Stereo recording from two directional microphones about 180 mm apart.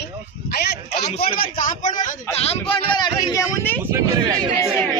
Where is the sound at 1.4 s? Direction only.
50° left (ahead or behind).